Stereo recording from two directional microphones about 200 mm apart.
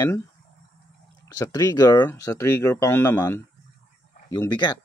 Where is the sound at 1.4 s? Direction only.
20° left (ahead or behind).